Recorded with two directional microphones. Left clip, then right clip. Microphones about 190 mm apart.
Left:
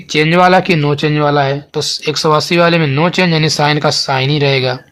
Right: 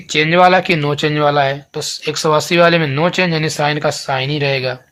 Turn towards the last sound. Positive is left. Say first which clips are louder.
# left 4 dB
turn(degrees=35)  # may be behind; listen again after turning